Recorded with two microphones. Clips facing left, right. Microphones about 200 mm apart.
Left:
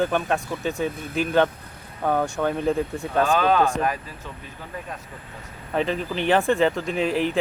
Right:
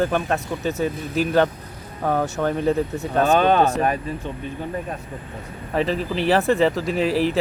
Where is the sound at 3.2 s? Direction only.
20° right (ahead or behind).